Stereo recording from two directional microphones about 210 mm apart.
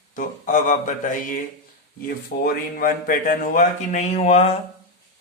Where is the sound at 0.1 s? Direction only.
40° left (ahead or behind).